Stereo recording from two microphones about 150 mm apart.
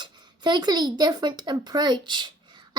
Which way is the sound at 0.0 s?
30° right (ahead or behind).